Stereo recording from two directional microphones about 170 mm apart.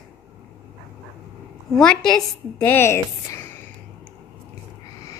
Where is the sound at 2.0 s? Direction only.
10° left (ahead or behind).